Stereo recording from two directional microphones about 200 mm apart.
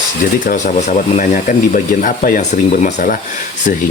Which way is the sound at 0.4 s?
40° left (ahead or behind).